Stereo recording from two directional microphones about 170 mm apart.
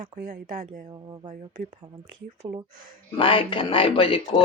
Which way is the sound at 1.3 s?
45° right (ahead or behind).